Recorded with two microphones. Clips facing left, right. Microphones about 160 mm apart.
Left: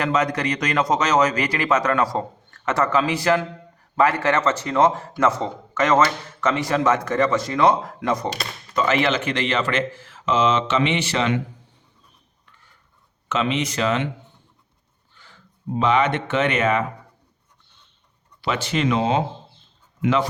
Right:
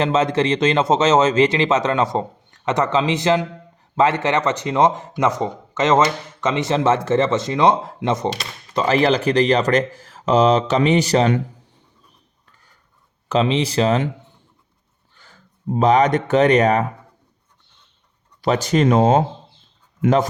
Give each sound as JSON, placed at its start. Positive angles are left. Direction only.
{"t": 0.0, "sound": "speech", "side_deg": -25}
{"t": 8.7, "sound": "speech", "side_deg": -35}
{"t": 13.2, "sound": "speech", "side_deg": -35}
{"t": 15.2, "sound": "speech", "side_deg": -40}
{"t": 18.4, "sound": "speech", "side_deg": -40}